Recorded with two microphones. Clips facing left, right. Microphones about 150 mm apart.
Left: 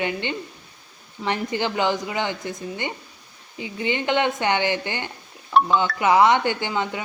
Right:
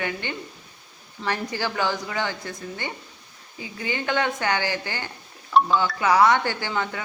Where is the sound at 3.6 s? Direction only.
20° left (ahead or behind).